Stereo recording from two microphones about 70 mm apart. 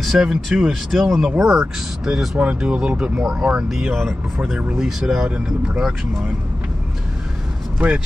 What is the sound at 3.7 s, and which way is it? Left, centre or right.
Speech, centre.